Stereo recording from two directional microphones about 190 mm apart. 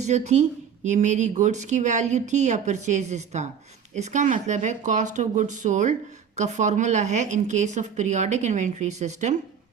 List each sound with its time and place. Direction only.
0.0 s speech: 35° right (ahead or behind)